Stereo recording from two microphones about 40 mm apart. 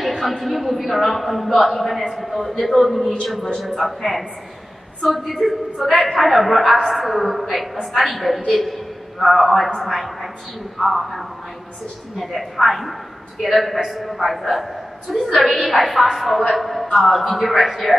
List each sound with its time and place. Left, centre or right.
0.4 s a woman's voice: centre